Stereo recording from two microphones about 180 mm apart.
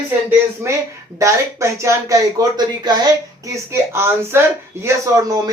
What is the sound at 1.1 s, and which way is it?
Speech, 15° right (ahead or behind).